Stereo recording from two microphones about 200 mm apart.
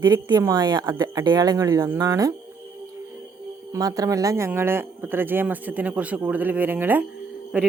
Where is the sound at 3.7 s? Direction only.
20° right (ahead or behind).